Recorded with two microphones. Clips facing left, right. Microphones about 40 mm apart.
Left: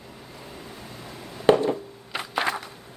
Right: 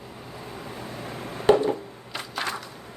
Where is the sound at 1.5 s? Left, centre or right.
Centre.